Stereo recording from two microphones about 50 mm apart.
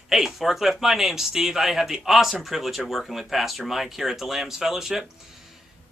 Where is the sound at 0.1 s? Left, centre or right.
Centre.